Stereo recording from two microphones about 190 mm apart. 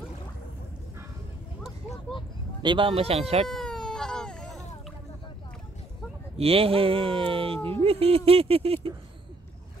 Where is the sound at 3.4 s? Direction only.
5° left (ahead or behind).